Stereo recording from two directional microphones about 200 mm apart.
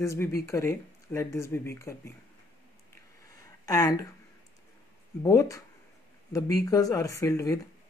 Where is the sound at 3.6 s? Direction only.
20° left (ahead or behind).